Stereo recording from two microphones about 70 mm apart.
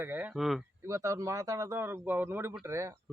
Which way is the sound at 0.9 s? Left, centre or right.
Right.